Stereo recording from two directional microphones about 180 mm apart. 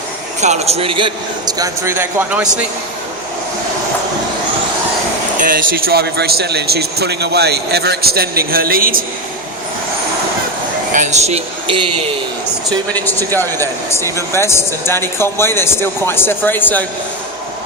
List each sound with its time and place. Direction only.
0.4 s a man's voice: 40° right (ahead or behind); by 2.6 s 10° right (ahead or behind)
5.4 s speech: 50° right (ahead or behind)
10.9 s speech: 40° right (ahead or behind)
12.9 s speech: 10° left (ahead or behind)